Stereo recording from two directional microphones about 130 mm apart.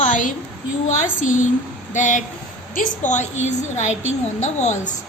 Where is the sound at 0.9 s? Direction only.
80° left.